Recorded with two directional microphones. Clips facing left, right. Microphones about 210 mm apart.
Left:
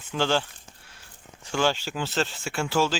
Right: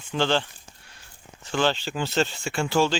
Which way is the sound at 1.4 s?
10° left (ahead or behind).